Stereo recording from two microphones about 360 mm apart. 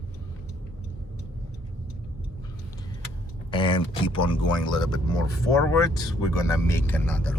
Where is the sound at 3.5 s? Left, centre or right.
Centre.